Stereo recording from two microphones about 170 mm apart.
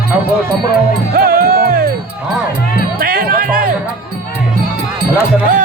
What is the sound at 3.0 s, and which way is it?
Music, 60° right (ahead or behind).